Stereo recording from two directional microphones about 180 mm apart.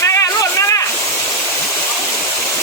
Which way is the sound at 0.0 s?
15° left (ahead or behind).